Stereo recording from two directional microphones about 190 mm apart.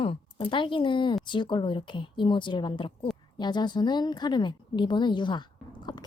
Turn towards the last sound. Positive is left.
turn(degrees=25)  # may be behind; listen again after turning